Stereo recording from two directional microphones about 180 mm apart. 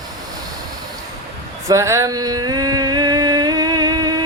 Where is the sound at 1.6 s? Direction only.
15° right (ahead or behind).